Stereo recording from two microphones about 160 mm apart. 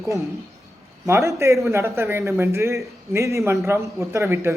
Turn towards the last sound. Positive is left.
turn(degrees=-15)  # may be behind; listen again after turning